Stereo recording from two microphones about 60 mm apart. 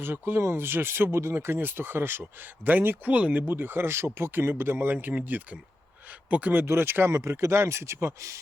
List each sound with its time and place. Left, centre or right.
0.0 s speech: right
3.1 s speech: right
3.4 s speech: right
7.1 s speech: right